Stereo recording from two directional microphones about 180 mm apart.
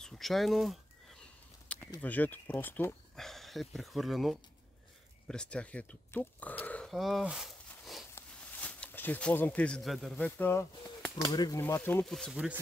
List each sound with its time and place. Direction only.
0.0 s speech: centre (ahead or behind)
2.0 s speech: 10° left (ahead or behind)
6.6 s a sound: 5° left (ahead or behind)
8.1 s speech: 10° left (ahead or behind)